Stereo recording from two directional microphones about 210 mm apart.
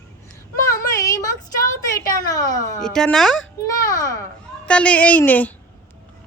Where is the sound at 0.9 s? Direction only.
15° left (ahead or behind).